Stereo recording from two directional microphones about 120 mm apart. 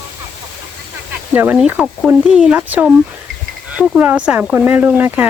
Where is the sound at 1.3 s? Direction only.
15° right (ahead or behind).